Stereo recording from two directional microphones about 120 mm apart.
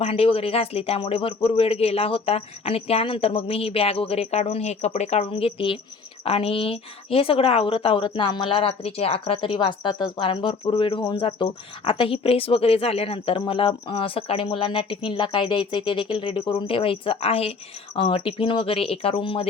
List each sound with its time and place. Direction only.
0.0 s speech: 55° left (ahead or behind); by 5.2 s 70° left (ahead or behind)
5.2 s a woman's voice: 50° left (ahead or behind)